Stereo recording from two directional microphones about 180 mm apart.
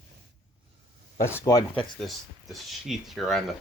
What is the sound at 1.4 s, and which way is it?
Speech, 20° left (ahead or behind).